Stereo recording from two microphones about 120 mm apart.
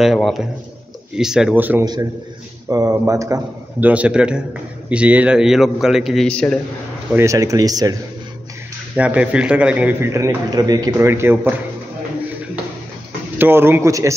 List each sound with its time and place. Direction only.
0.0 s a man's voice: centre (ahead or behind)
1.6 s a man's voice: 15° right (ahead or behind)
2.7 s speech: 25° right (ahead or behind)
3.8 s a man's voice: 10° right (ahead or behind)
6.2 s a man's voice: 5° left (ahead or behind)
7.2 s speech: 25° right (ahead or behind)
8.9 s a man's voice: 10° right (ahead or behind); by 10.9 s 30° right (ahead or behind)
10.9 s speech: 20° right (ahead or behind)
13.4 s speech: 20° right (ahead or behind)